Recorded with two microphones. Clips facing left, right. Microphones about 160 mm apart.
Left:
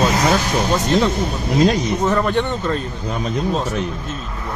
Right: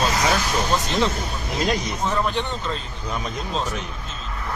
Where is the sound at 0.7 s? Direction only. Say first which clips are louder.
Left 7 dB; 55° left (ahead or behind).